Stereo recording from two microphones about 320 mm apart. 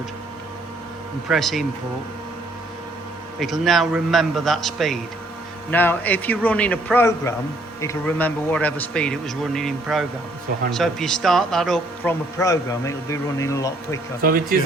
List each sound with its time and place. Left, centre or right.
1.3 s a man's voice: centre
3.3 s a man's voice: centre
14.2 s speech: right